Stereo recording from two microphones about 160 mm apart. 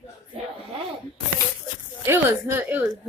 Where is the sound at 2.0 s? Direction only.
10° right (ahead or behind).